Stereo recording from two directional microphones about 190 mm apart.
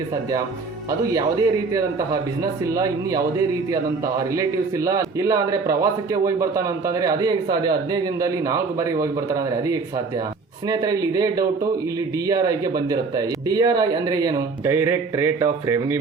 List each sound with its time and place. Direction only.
0.9 s a man's voice: 20° right (ahead or behind)
4.4 s a man's voice: 15° right (ahead or behind)